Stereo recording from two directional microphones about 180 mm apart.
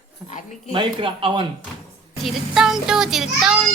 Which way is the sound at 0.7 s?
30° right (ahead or behind).